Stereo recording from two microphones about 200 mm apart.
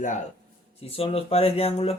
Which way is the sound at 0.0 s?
40° left (ahead or behind).